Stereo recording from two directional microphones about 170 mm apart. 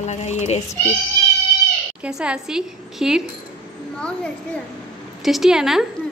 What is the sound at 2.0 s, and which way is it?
A woman's voice, 5° right (ahead or behind).